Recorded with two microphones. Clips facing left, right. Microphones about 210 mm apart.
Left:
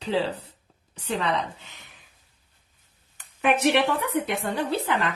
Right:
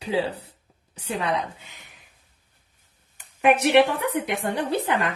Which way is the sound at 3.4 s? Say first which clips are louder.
Right 4 dB; 10° right (ahead or behind).